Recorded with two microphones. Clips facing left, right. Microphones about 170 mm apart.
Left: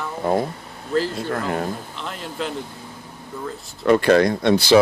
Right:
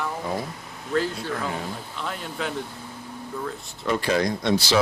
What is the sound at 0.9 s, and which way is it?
Speech, centre (ahead or behind).